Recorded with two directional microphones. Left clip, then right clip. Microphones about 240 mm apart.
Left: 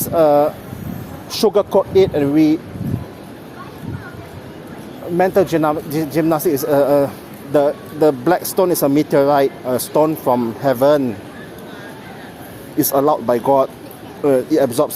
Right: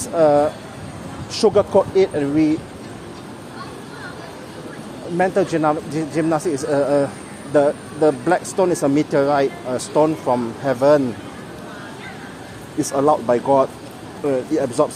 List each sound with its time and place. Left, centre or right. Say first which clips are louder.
0.0 s speech: left 2 dB; left
5.1 s speech: left 4 dB; left
12.8 s speech: left 2 dB; left